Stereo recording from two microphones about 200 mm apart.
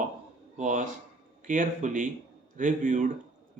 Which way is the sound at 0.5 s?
40° right (ahead or behind).